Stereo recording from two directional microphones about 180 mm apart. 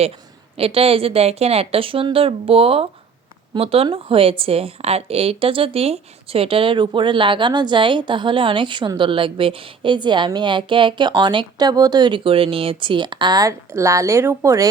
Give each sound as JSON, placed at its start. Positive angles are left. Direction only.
{"t": 0.5, "sound": "a woman's voice", "side_deg": -30}